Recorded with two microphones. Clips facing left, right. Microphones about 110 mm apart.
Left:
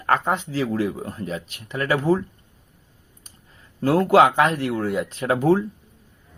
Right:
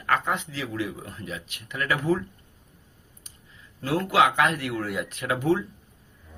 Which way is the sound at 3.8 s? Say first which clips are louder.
Left 6 dB; 45° left (ahead or behind).